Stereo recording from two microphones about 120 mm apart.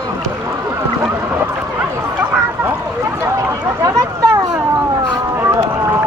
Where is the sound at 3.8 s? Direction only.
30° right (ahead or behind).